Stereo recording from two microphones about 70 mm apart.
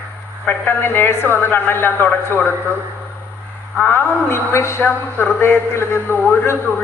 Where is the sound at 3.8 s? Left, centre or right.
Left.